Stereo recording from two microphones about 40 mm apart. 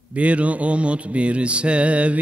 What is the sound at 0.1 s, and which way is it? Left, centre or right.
Music, right.